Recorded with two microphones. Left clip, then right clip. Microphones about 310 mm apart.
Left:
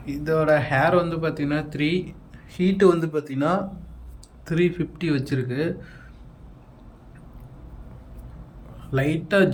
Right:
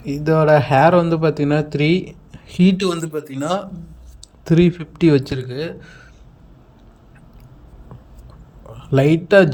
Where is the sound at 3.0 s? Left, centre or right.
Centre.